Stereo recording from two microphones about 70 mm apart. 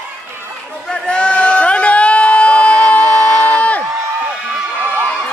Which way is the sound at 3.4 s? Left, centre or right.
Left.